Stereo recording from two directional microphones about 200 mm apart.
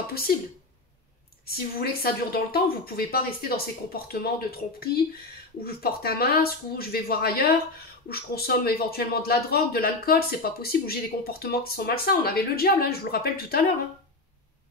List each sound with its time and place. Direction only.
1.5 s a man's voice: 50° left (ahead or behind)